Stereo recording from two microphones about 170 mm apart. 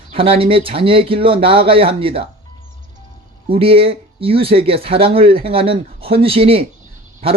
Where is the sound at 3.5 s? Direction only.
35° right (ahead or behind).